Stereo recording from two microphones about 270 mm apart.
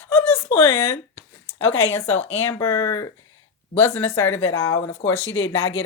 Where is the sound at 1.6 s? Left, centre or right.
Left.